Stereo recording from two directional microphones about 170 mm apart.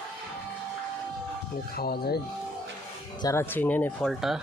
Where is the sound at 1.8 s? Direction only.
65° left (ahead or behind).